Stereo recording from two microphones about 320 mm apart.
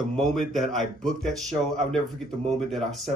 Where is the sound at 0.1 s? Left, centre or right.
Centre.